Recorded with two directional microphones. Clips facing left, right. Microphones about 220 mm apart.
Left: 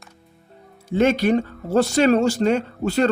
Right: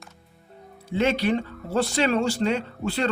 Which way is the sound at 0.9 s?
45° left (ahead or behind).